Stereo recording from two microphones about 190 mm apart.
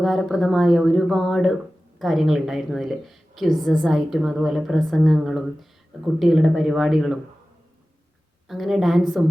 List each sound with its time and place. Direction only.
0.0 s a woman's voice: centre (ahead or behind)
8.4 s a woman's voice: centre (ahead or behind)